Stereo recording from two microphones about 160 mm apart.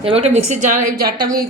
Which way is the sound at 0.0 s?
40° right (ahead or behind).